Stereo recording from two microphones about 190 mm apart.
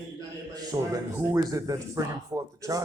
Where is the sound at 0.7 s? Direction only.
20° right (ahead or behind).